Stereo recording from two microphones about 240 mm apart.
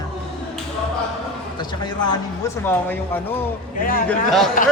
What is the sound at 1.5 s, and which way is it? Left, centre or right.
Speech, centre.